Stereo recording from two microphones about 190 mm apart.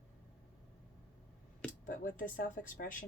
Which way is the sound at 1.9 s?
45° left (ahead or behind).